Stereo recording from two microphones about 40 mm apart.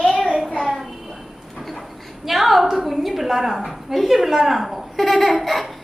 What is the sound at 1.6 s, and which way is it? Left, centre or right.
Train, centre.